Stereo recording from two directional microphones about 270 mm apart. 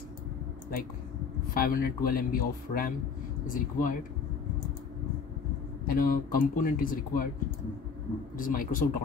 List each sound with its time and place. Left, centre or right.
1.5 s speech: left
5.9 s speech: left
8.4 s speech: left